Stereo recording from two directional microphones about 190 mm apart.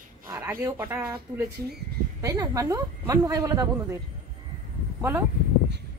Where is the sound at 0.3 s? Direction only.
15° right (ahead or behind).